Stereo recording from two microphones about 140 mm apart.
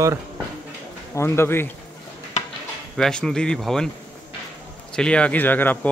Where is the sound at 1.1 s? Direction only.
20° left (ahead or behind).